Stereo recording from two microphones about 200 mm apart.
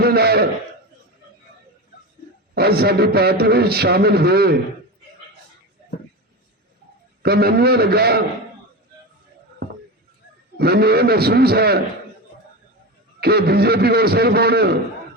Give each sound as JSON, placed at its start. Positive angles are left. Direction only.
{"t": 0.0, "sound": "a sound", "side_deg": -50}
{"t": 2.6, "sound": "a man's voice", "side_deg": -50}
{"t": 7.2, "sound": "a man's voice", "side_deg": -50}
{"t": 10.6, "sound": "a man's voice", "side_deg": -50}
{"t": 13.1, "sound": "a man's voice", "side_deg": -50}